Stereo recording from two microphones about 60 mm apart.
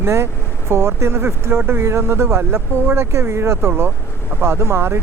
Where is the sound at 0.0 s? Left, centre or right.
Right.